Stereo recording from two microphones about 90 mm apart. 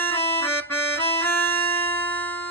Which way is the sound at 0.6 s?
25° left (ahead or behind).